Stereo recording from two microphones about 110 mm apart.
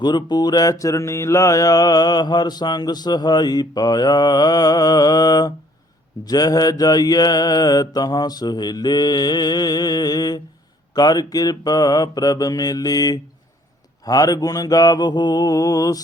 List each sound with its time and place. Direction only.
0.0 s music: 40° left (ahead or behind)